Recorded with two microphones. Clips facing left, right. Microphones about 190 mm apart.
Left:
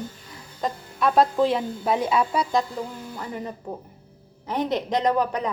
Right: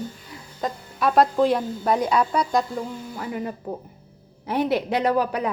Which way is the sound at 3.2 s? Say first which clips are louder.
Right 3 dB; 10° right (ahead or behind).